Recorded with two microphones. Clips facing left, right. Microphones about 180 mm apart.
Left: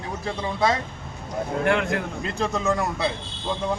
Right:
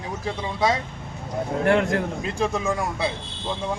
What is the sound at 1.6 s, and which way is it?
Speech, 40° right (ahead or behind).